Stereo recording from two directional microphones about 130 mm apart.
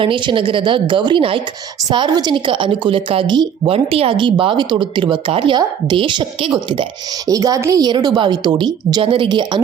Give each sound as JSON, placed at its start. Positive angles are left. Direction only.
{"t": 0.0, "sound": "a woman's voice", "side_deg": -40}
{"t": 7.3, "sound": "a woman's voice", "side_deg": -25}